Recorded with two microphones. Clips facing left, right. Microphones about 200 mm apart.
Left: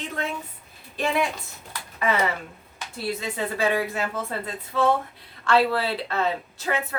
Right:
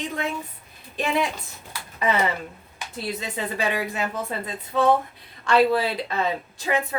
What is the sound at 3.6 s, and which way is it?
Speech, 15° right (ahead or behind).